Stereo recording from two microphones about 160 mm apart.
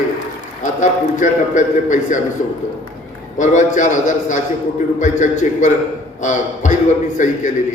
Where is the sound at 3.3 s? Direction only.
50° left (ahead or behind).